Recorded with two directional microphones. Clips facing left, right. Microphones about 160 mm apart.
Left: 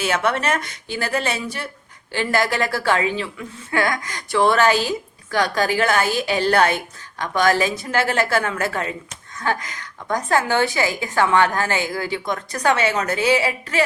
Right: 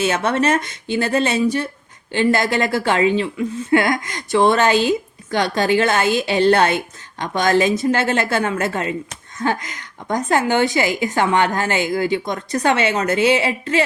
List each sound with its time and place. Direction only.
0.0 s a woman's voice: 20° right (ahead or behind)